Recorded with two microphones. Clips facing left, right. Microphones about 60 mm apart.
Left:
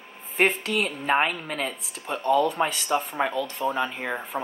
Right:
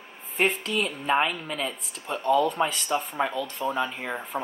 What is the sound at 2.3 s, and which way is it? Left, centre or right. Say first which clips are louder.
Speech: left 1 dB; centre.